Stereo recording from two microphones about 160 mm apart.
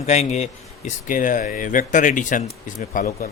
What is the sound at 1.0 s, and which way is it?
Speech, 55° left (ahead or behind).